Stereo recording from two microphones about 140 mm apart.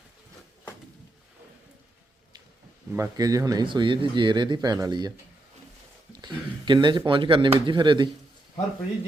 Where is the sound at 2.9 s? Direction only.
25° right (ahead or behind).